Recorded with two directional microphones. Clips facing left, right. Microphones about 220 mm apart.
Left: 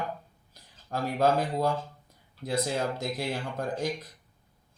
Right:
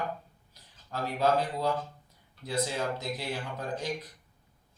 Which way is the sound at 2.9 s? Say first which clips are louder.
Left 3 dB; 45° left (ahead or behind).